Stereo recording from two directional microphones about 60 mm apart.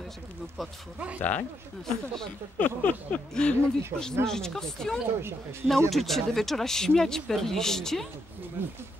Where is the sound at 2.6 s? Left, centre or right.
Left.